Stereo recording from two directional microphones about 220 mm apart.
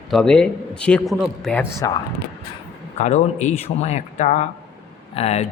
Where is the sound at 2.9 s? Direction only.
30° left (ahead or behind).